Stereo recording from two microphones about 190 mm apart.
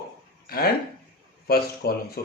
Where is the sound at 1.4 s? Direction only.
55° left (ahead or behind).